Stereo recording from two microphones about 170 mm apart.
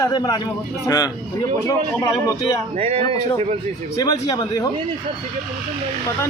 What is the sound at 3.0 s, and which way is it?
A man's voice, 20° left (ahead or behind).